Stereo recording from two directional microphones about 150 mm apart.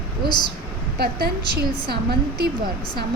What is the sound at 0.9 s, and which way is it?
A woman's voice, 90° right.